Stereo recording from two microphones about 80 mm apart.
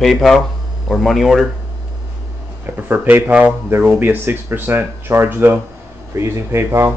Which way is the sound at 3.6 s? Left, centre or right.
Right.